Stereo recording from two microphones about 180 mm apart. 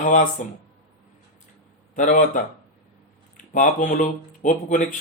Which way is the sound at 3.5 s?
45° left (ahead or behind).